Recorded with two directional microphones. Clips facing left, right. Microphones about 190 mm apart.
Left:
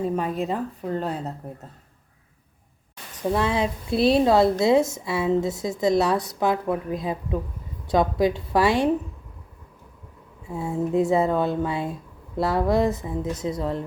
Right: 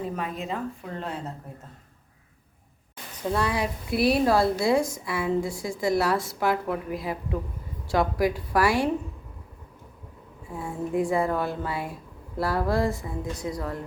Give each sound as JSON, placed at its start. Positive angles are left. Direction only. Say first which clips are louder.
{"t": 0.2, "sound": "speech", "louder": "left 5 dB", "side_deg": 35}
{"t": 3.2, "sound": "a woman's voice", "louder": "left 3 dB", "side_deg": 20}
{"t": 10.5, "sound": "a woman's voice", "louder": "left 5 dB", "side_deg": 25}